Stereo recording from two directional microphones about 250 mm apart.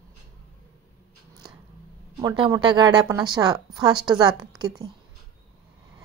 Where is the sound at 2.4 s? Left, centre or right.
Centre.